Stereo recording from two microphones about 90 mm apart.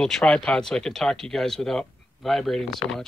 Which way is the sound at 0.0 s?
10° left (ahead or behind).